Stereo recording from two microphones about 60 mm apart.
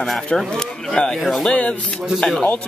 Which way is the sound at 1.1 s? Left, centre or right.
Centre.